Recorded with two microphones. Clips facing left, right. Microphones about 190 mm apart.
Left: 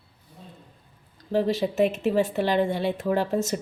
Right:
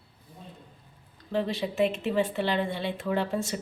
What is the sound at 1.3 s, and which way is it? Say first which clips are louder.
Speech: left 5 dB; 40° left (ahead or behind).